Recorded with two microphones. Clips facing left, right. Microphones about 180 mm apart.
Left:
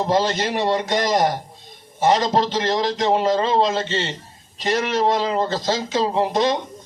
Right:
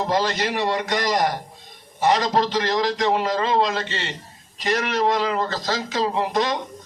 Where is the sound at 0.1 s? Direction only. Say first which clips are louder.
Left 4 dB; 25° left (ahead or behind).